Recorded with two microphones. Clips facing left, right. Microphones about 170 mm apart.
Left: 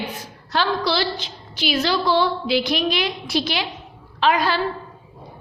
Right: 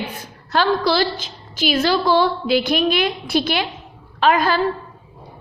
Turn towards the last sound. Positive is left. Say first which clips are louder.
# right 3 dB
turn(degrees=-50)  # may be behind; listen again after turning